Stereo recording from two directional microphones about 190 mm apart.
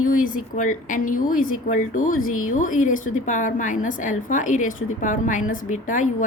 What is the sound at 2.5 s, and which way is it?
A woman's voice, 45° left (ahead or behind).